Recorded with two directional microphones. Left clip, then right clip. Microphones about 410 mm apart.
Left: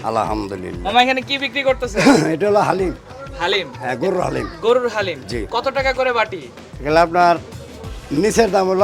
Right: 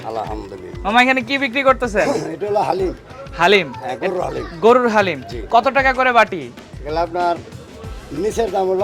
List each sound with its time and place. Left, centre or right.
0.1 s speech: left
0.9 s speech: right
2.4 s speech: left
3.3 s speech: right
3.8 s speech: left
4.6 s speech: right
6.8 s speech: left